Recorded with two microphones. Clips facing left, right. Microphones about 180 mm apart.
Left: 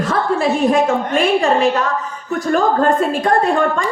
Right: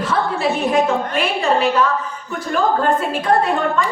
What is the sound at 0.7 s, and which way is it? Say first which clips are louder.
A woman's voice: left 2 dB; 45° left (ahead or behind).